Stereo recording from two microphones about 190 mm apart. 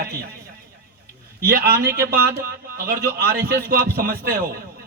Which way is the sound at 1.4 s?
55° right (ahead or behind).